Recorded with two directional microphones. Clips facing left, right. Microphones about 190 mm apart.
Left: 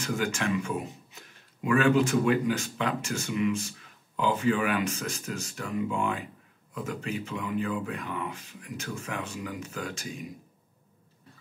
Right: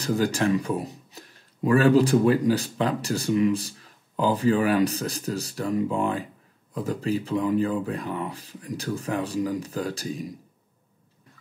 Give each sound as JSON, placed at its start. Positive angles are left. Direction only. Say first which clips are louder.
{"t": 0.0, "sound": "speech", "louder": "right 6 dB", "side_deg": -35}